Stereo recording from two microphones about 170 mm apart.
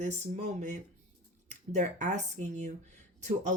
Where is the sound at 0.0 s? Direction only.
40° right (ahead or behind).